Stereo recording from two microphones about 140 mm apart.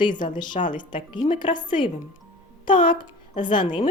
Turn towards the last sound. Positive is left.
turn(degrees=35)  # may be behind; listen again after turning